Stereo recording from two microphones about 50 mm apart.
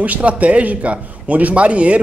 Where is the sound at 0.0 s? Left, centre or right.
Right.